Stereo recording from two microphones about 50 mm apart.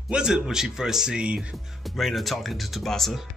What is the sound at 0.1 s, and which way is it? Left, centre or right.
Speech, centre.